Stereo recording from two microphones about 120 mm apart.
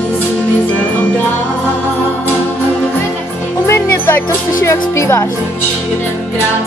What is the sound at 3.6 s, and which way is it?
Music, 20° left (ahead or behind).